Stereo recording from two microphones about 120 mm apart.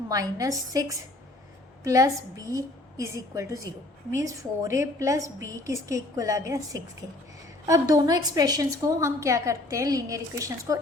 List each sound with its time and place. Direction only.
0.1 s a woman's voice: 30° right (ahead or behind)